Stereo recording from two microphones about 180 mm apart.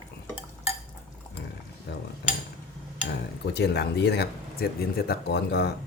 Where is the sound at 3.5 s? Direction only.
70° left (ahead or behind).